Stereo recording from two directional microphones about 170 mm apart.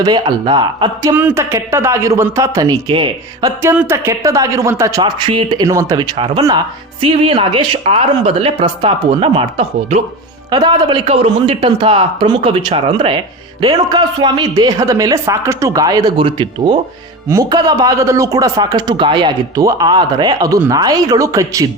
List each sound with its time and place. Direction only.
0.0 s speech: 25° right (ahead or behind)
1.1 s speech: 15° right (ahead or behind)
3.6 s a woman's voice: 15° right (ahead or behind)